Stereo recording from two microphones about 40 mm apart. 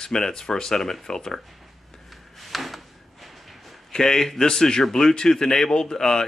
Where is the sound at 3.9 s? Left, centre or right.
Centre.